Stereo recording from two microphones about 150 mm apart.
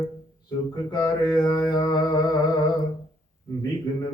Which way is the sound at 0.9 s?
25° left (ahead or behind).